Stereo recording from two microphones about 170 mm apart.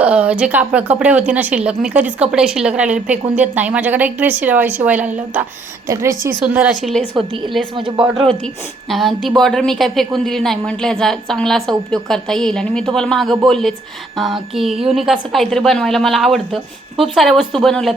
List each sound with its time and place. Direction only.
0.0 s a woman's voice: 5° right (ahead or behind)
7.8 s speech: 30° right (ahead or behind)
8.0 s a woman's voice: centre (ahead or behind)